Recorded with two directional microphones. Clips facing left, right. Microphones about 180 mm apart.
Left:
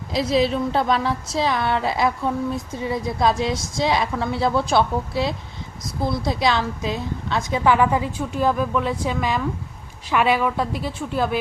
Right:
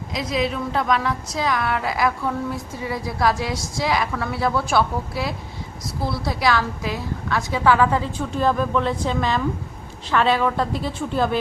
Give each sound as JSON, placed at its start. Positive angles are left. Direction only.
{"t": 0.1, "sound": "a woman's voice", "side_deg": 30}